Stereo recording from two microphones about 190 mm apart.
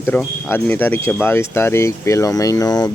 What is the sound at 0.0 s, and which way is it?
Speech, 5° left (ahead or behind).